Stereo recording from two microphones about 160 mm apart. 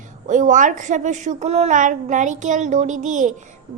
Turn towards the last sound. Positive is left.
turn(degrees=-50)  # may be behind; listen again after turning